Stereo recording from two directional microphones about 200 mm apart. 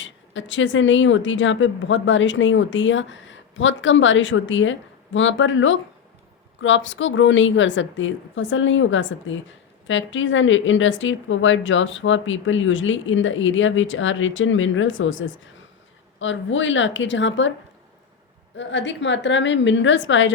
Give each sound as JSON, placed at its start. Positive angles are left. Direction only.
{"t": 0.0, "sound": "speech", "side_deg": 70}
{"t": 18.5, "sound": "speech", "side_deg": 65}